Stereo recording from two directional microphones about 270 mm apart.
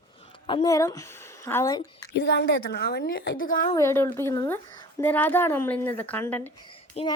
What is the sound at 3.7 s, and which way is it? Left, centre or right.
A woman's voice, centre.